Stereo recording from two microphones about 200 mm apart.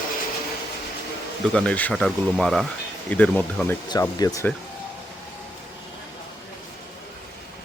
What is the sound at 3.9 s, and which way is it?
Speech, 15° left (ahead or behind).